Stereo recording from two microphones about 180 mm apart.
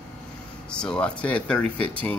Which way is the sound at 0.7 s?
5° left (ahead or behind).